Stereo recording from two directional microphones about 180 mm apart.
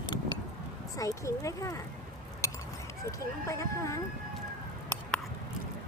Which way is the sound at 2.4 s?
15° left (ahead or behind).